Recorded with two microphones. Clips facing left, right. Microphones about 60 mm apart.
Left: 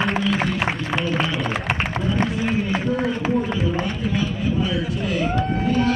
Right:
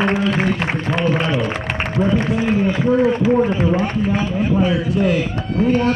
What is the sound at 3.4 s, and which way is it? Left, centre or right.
Run, right.